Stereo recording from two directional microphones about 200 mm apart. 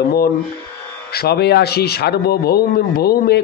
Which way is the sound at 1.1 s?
55° left (ahead or behind).